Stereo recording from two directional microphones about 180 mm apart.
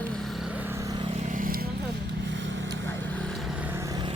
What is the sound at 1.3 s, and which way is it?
Vehicle, 50° right (ahead or behind).